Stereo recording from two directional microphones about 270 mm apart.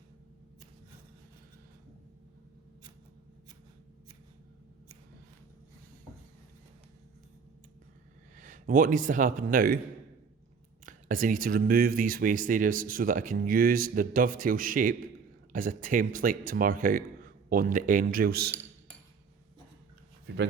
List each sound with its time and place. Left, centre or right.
8.4 s speech: right
10.8 s speech: right
20.2 s a sound: right